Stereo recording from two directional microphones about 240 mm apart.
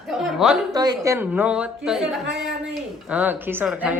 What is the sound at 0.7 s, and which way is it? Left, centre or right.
A woman's voice, centre.